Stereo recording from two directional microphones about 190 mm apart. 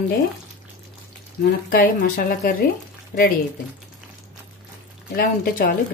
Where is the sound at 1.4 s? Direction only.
50° left (ahead or behind).